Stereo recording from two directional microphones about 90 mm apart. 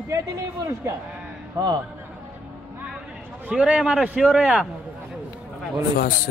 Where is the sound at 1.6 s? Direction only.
40° right (ahead or behind).